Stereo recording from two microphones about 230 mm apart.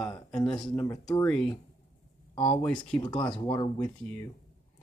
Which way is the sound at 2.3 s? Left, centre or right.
Left.